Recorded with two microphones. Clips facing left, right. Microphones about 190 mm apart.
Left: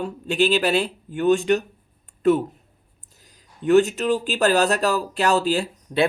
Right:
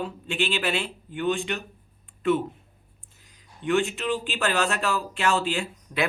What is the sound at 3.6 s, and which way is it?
Speech, 40° left (ahead or behind).